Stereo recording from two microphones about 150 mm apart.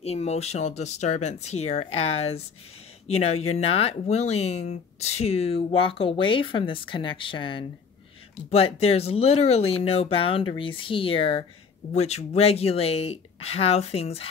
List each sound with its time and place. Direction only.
0.0 s speech: 45° left (ahead or behind)